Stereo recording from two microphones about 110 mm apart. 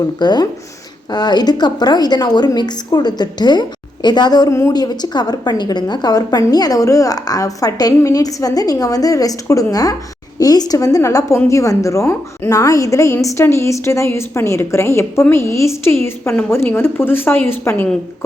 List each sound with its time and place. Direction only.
0.2 s a woman's voice: 40° left (ahead or behind); by 17.8 s 20° left (ahead or behind)